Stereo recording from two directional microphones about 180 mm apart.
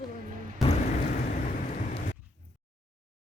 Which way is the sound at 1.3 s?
45° left (ahead or behind).